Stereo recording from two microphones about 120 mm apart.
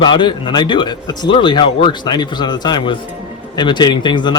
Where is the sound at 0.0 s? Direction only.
40° left (ahead or behind).